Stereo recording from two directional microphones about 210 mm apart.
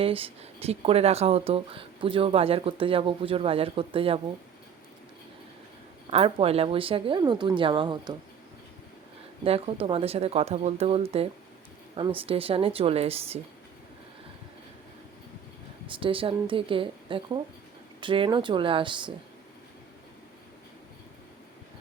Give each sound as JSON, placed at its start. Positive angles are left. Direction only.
{"t": 0.0, "sound": "speech", "side_deg": -25}
{"t": 6.1, "sound": "speech", "side_deg": -30}
{"t": 9.4, "sound": "speech", "side_deg": -30}
{"t": 15.9, "sound": "speech", "side_deg": -25}